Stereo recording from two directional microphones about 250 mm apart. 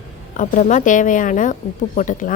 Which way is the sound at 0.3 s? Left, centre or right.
Left.